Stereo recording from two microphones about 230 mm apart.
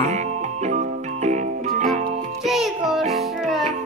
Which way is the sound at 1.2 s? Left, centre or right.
Right.